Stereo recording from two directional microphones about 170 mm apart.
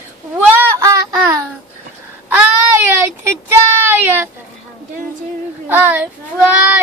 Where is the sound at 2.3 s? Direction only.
10° right (ahead or behind).